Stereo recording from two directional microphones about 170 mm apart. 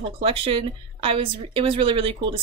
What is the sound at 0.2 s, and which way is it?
A woman's voice, 35° right (ahead or behind).